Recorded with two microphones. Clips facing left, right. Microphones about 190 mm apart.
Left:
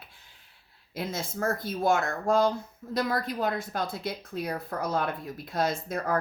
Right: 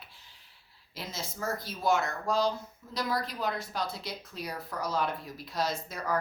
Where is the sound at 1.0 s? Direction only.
55° left (ahead or behind).